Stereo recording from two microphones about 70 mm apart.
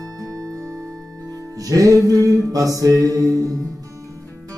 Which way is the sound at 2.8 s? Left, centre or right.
Right.